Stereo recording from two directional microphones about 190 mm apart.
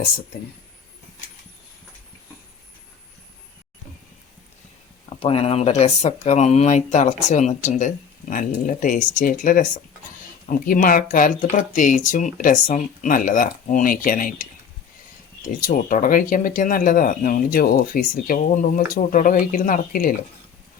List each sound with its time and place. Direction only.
5.0 s speech: 30° left (ahead or behind); by 14.4 s 45° left (ahead or behind)
15.4 s speech: 40° left (ahead or behind)